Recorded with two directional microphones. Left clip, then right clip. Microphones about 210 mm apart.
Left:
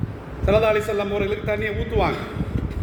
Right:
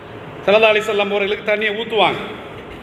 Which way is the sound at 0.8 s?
40° right (ahead or behind).